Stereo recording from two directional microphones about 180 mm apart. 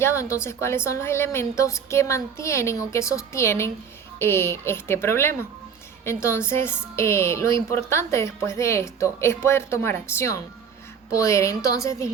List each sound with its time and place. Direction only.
0.0 s speech: 15° left (ahead or behind)